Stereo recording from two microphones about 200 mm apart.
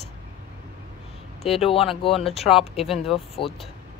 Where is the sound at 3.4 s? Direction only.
25° left (ahead or behind).